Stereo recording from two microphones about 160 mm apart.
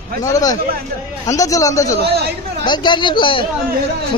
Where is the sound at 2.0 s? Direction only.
90° right.